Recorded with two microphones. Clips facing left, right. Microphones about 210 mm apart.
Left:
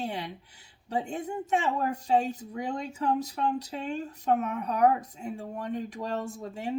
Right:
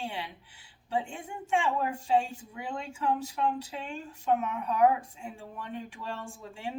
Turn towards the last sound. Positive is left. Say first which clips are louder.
# left 5 dB
turn(degrees=40)  # may be behind; listen again after turning